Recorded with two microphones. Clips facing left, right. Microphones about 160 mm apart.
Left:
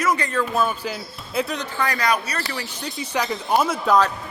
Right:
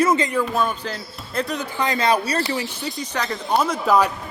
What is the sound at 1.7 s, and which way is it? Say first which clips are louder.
Speech: right 3 dB; 20° right (ahead or behind).